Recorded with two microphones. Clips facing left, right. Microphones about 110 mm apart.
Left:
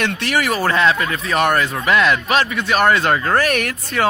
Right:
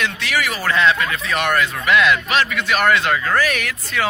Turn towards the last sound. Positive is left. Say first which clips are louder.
# left 3 dB
turn(degrees=45)  # may be behind; listen again after turning